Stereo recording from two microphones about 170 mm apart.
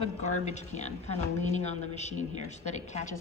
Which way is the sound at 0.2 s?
45° left (ahead or behind).